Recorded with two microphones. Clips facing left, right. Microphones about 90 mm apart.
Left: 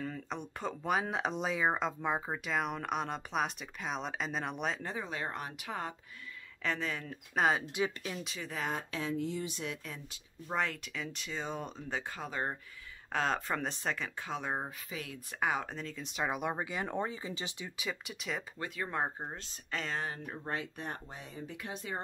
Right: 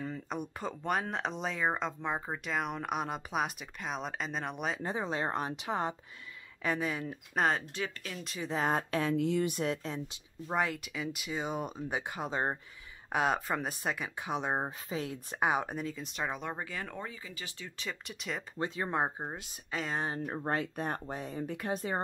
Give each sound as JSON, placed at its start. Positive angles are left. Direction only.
{"t": 0.0, "sound": "speech", "side_deg": -10}
{"t": 4.8, "sound": "speech", "side_deg": -25}
{"t": 6.6, "sound": "speech", "side_deg": -10}
{"t": 7.4, "sound": "speech", "side_deg": 5}
{"t": 7.8, "sound": "speech", "side_deg": 20}
{"t": 8.5, "sound": "speech", "side_deg": -35}
{"t": 8.7, "sound": "speech", "side_deg": -55}
{"t": 9.1, "sound": "speech", "side_deg": -75}
{"t": 10.5, "sound": "speech", "side_deg": -5}
{"t": 13.1, "sound": "speech", "side_deg": -10}
{"t": 17.7, "sound": "speech", "side_deg": 5}
{"t": 18.6, "sound": "speech", "side_deg": -25}
{"t": 20.2, "sound": "speech", "side_deg": -50}